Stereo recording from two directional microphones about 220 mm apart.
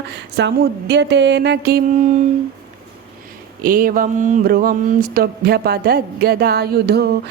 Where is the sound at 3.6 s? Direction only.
40° right (ahead or behind).